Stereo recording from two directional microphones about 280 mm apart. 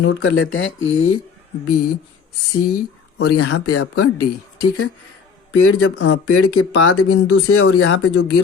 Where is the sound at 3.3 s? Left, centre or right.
Left.